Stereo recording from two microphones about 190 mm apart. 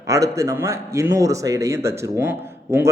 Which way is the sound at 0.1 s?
15° right (ahead or behind).